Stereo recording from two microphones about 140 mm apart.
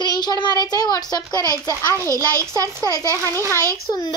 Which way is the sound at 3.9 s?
30° left (ahead or behind).